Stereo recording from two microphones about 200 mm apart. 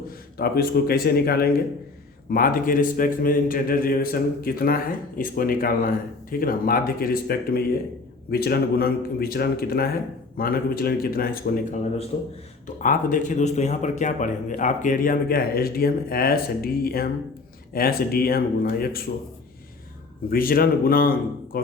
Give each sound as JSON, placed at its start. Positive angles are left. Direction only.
{"t": 0.3, "sound": "speech", "side_deg": 50}
{"t": 20.3, "sound": "speech", "side_deg": 45}